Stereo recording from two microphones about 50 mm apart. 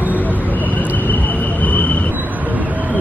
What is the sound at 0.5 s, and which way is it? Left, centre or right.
Vehicle, left.